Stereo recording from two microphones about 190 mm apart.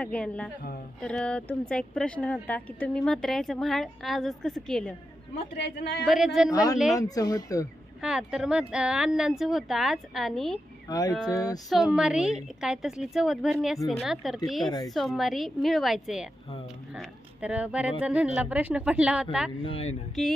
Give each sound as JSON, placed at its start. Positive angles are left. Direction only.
{"t": 0.0, "sound": "a woman's voice", "side_deg": 5}
{"t": 6.0, "sound": "speech", "side_deg": 0}
{"t": 6.5, "sound": "a woman's voice", "side_deg": 20}
{"t": 8.0, "sound": "speech", "side_deg": -5}
{"t": 10.9, "sound": "female singing", "side_deg": 20}
{"t": 11.7, "sound": "a woman's voice", "side_deg": -5}
{"t": 19.6, "sound": "speech", "side_deg": 30}